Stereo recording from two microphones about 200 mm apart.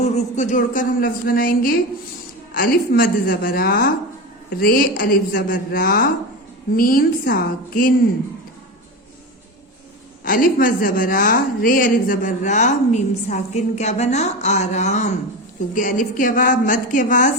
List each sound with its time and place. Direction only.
0.0 s speech: 35° left (ahead or behind)
10.2 s a woman's voice: 45° left (ahead or behind)